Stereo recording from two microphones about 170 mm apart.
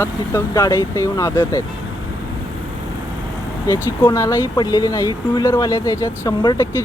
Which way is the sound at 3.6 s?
20° left (ahead or behind).